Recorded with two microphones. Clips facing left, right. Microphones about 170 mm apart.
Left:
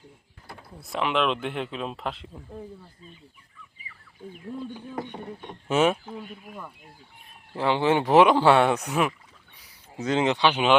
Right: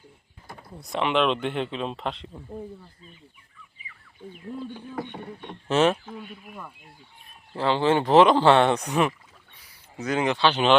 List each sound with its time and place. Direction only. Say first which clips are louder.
0.9 s speech: right 2 dB; centre (ahead or behind)
4.6 s speech: even; 15° left (ahead or behind)
5.1 s speech: even; centre (ahead or behind)
6.3 s speech: left 1 dB; centre (ahead or behind)
7.5 s speech: right 1 dB; 15° left (ahead or behind)
9.6 s speech: left 1 dB; 25° left (ahead or behind)